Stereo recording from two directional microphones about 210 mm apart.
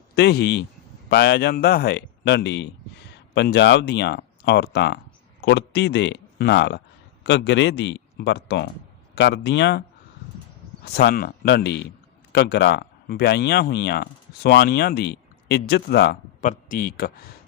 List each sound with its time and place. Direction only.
0.2 s speech: 50° left (ahead or behind)
10.8 s speech: 50° left (ahead or behind)